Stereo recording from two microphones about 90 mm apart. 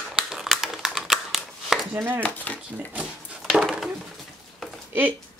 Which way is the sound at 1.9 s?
25° right (ahead or behind).